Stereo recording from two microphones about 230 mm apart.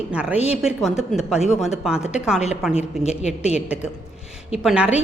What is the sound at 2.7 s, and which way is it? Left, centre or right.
Speech, left.